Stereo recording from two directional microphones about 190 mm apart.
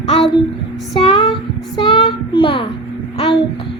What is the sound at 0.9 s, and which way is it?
Child singing, 30° left (ahead or behind).